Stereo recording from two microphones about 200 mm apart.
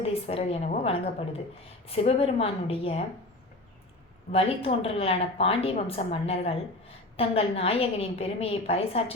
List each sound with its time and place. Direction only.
0.0 s a woman's voice: 30° left (ahead or behind)
4.3 s a woman's voice: 30° left (ahead or behind)